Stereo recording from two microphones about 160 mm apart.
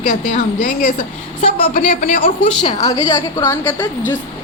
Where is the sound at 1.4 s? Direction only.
35° left (ahead or behind).